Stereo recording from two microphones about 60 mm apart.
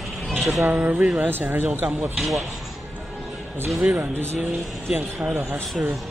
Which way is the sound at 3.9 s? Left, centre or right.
Right.